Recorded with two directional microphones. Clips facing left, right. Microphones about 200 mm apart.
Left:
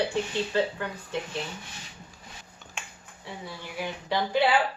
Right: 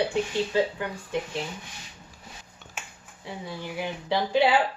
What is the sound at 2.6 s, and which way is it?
Finger snapping, 5° right (ahead or behind).